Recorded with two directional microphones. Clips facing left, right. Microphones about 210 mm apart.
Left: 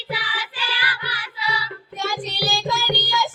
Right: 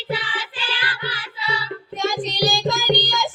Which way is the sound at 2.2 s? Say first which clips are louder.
Right 5 dB; 10° left (ahead or behind).